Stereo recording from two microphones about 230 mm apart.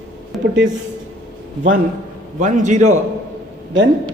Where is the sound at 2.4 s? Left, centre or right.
Right.